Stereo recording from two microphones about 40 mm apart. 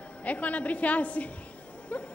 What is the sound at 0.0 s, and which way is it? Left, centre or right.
A woman's voice, left.